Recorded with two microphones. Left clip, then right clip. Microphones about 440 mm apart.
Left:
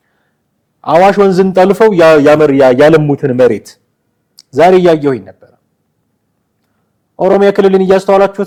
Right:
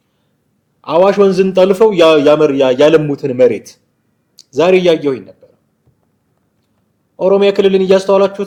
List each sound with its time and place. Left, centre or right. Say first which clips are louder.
0.8 s a man's voice: left 3 dB; left
7.2 s a man's voice: left 2 dB; left